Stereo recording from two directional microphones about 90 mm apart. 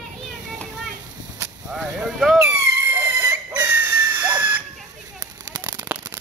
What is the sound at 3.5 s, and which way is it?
Dog, 20° right (ahead or behind).